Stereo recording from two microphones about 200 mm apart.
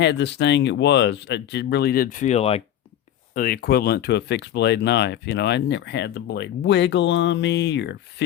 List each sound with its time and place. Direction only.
0.0 s speech: 60° left (ahead or behind); by 2.6 s 30° left (ahead or behind)
3.3 s speech: 45° left (ahead or behind)